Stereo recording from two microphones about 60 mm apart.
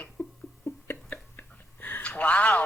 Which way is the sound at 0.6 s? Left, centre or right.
Left.